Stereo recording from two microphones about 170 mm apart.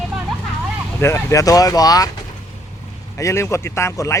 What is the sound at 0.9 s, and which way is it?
Speech, 15° left (ahead or behind).